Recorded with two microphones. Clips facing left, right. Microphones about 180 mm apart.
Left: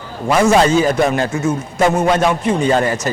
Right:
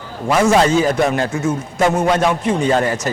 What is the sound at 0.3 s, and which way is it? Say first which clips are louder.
A man's voice: left 1 dB; 20° left (ahead or behind).